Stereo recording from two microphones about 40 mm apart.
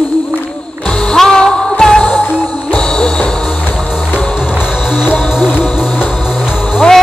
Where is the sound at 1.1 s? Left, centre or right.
Centre.